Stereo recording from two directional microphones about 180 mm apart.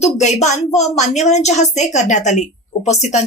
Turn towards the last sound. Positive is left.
turn(degrees=40)  # may be behind; listen again after turning